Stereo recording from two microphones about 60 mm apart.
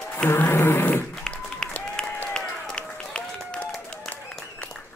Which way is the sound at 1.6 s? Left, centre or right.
Centre.